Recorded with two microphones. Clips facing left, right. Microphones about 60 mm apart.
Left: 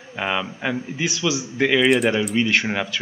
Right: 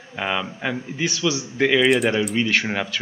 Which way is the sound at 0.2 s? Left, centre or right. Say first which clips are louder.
Left 1 dB; centre.